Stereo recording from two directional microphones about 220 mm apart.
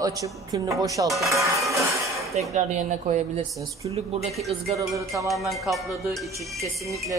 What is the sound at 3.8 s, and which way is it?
Speech, 20° right (ahead or behind).